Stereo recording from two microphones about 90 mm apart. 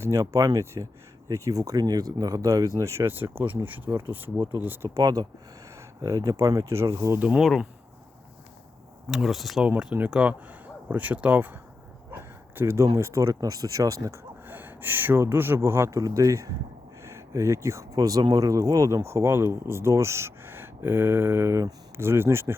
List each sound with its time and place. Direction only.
0.0 s speech: 35° right (ahead or behind)
4.9 s speech: 40° right (ahead or behind)
7.2 s speech: 15° right (ahead or behind)
9.0 s speech: 5° right (ahead or behind)
9.6 s speech: 15° right (ahead or behind)
12.1 s a sound: 25° right (ahead or behind)
13.0 s speech: 35° right (ahead or behind)
14.4 s speech: 20° right (ahead or behind)